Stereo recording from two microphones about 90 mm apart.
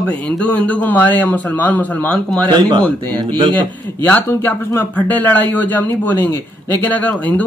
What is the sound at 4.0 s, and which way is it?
Speech, 20° left (ahead or behind).